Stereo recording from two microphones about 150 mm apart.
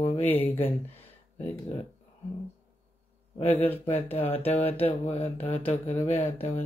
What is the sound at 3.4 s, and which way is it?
Speech, 15° left (ahead or behind).